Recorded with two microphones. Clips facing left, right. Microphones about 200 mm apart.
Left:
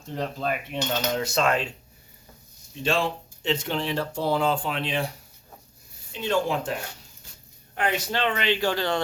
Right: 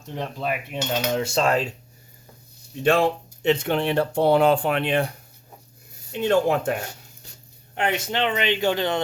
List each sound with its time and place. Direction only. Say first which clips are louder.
0.3 s cutlery: right 1 dB; 10° right (ahead or behind)
1.2 s speech: right 2 dB; 30° right (ahead or behind)
2.8 s speech: right 6 dB; 60° right (ahead or behind)
6.1 s speech: right 5 dB; 55° right (ahead or behind)
7.8 s speech: right 2 dB; 25° right (ahead or behind)